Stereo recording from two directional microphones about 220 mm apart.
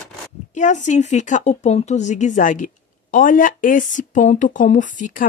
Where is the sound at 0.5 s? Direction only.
35° left (ahead or behind).